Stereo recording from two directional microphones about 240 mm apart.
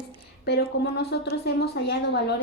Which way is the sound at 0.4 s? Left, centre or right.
Left.